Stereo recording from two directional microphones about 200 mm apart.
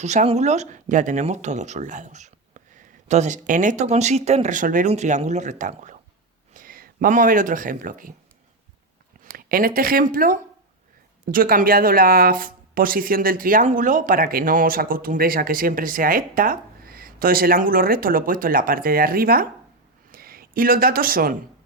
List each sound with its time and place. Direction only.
0.0 s speech: 35° right (ahead or behind)
9.2 s speech: 45° right (ahead or behind)